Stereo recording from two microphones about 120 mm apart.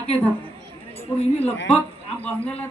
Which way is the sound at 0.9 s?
55° left (ahead or behind).